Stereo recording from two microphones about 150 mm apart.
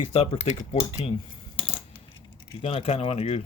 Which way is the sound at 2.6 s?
40° left (ahead or behind).